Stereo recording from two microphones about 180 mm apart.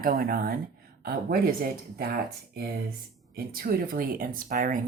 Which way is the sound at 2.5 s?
60° right (ahead or behind).